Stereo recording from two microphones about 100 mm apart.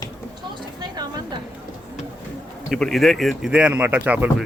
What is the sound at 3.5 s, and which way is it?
Speech, 10° right (ahead or behind).